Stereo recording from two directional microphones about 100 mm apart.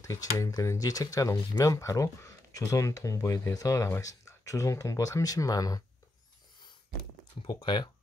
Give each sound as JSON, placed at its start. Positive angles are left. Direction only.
{"t": 0.0, "sound": "speech", "side_deg": 35}
{"t": 7.4, "sound": "speech", "side_deg": 50}